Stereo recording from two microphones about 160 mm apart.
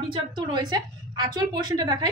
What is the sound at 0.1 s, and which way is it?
A woman's voice, 30° right (ahead or behind).